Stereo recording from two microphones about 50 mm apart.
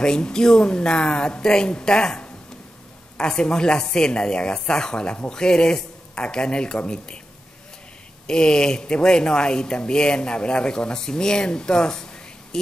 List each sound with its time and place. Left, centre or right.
0.0 s speech: centre
8.3 s speech: centre